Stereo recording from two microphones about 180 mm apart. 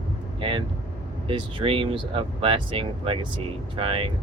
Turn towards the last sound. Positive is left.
turn(degrees=-30)  # may be behind; listen again after turning